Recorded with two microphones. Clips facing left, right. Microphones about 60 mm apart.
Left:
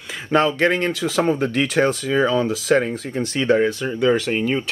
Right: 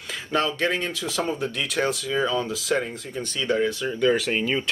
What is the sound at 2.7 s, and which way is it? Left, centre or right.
Speech, left.